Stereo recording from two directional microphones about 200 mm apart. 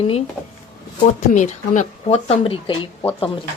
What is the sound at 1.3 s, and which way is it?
Speech, 40° left (ahead or behind).